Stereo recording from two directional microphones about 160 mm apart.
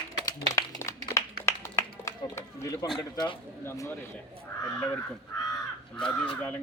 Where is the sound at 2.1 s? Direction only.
15° left (ahead or behind).